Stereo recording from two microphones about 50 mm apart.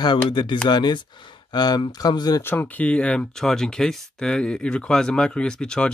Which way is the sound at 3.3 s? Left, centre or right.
Centre.